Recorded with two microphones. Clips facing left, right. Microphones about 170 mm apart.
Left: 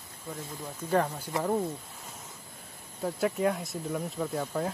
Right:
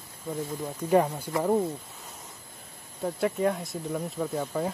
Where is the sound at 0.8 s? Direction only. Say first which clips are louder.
Right 4 dB; 15° right (ahead or behind).